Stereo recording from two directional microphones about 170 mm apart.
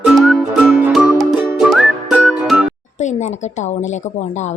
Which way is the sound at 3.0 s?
45° left (ahead or behind).